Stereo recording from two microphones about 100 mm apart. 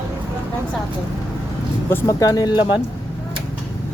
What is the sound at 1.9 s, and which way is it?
Speech, 35° left (ahead or behind).